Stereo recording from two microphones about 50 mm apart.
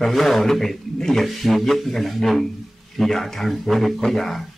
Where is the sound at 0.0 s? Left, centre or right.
Centre.